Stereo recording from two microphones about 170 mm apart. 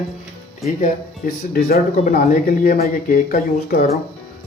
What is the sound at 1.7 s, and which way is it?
Speech, 55° left (ahead or behind).